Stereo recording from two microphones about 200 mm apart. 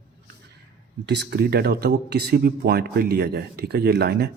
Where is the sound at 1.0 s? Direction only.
60° right (ahead or behind).